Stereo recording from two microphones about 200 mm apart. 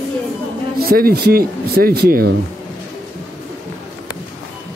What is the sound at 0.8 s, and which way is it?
Speech, 50° right (ahead or behind).